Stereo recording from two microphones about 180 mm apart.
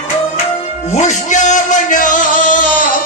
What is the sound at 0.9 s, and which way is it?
Music, 40° left (ahead or behind).